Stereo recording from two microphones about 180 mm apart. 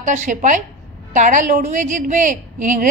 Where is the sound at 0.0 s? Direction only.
45° right (ahead or behind).